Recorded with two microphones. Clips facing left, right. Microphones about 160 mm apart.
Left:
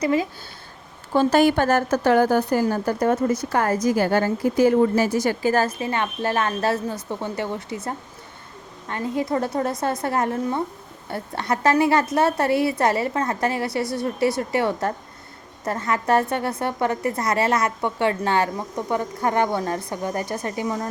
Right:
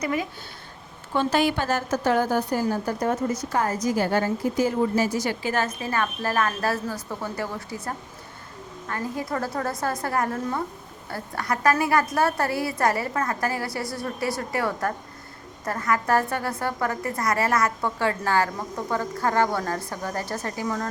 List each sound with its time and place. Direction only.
0.0 s a woman's voice: 30° left (ahead or behind)
1.1 s a woman's voice: 40° left (ahead or behind)
5.8 s a woman's voice: 25° left (ahead or behind)
8.9 s a woman's voice: 20° left (ahead or behind)